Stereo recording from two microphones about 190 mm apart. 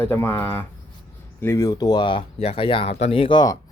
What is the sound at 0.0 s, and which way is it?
Speech, 10° left (ahead or behind).